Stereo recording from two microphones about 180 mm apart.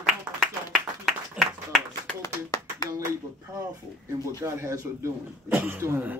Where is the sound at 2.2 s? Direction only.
20° left (ahead or behind).